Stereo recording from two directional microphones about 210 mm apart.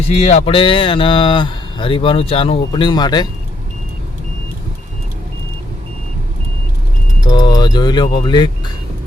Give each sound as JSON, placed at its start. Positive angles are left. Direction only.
{"t": 0.1, "sound": "speech", "side_deg": 30}
{"t": 7.3, "sound": "speech", "side_deg": 20}